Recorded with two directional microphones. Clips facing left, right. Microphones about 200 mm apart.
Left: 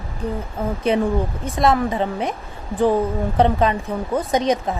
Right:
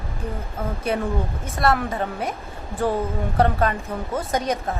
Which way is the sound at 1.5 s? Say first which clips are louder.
Left 3 dB; 15° left (ahead or behind).